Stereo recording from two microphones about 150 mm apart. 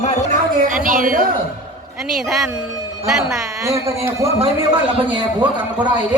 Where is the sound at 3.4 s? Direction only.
20° right (ahead or behind).